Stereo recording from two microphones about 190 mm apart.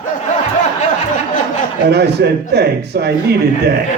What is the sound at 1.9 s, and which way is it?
A man's voice, 60° right (ahead or behind).